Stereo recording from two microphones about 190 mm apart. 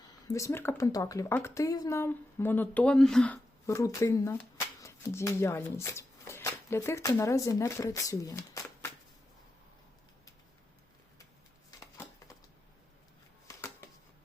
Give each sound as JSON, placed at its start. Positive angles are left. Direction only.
{"t": 0.3, "sound": "speech", "side_deg": 15}
{"t": 3.7, "sound": "speech", "side_deg": 20}
{"t": 11.8, "sound": "a sound", "side_deg": 15}